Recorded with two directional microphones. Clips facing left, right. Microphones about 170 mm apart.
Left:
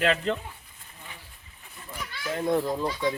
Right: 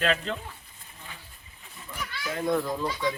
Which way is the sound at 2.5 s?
25° left (ahead or behind).